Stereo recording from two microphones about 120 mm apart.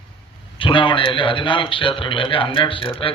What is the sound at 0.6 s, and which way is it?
A man's voice, 45° left (ahead or behind).